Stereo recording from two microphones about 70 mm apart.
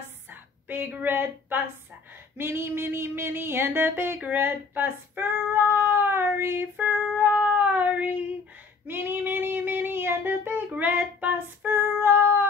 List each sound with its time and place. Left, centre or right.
0.3 s a sound: right
2.3 s music: right
4.2 s female singing: right
7.3 s cat: centre
8.8 s child singing: right